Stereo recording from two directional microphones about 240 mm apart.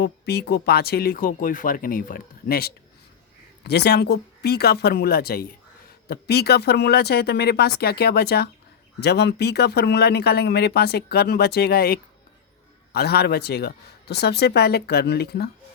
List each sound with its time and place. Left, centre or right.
0.0 s speech: left